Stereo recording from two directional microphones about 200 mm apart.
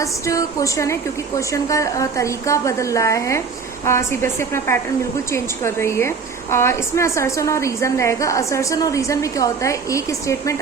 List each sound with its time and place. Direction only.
0.0 s a woman's voice: 15° left (ahead or behind)